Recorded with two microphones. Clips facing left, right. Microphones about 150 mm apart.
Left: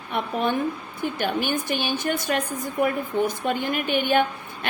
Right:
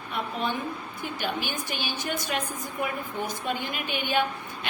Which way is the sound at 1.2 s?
50° left (ahead or behind).